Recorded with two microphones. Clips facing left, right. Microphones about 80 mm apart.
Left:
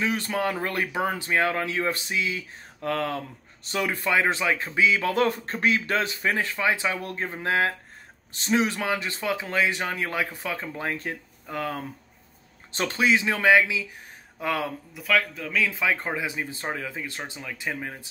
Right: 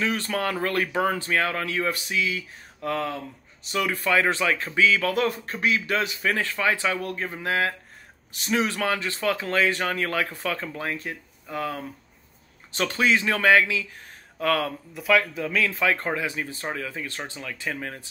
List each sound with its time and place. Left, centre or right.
0.0 s speech: centre; by 3.2 s left
3.8 s speech: left
5.1 s speech: left; by 10.8 s centre
11.1 s speech: left
13.0 s speech: centre
15.0 s speech: centre
15.6 s speech: centre
16.3 s speech: left